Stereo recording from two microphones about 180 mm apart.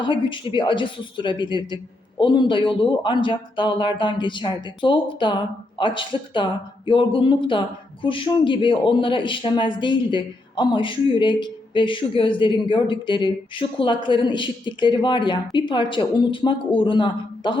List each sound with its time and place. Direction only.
0.0 s a man's voice: 25° left (ahead or behind)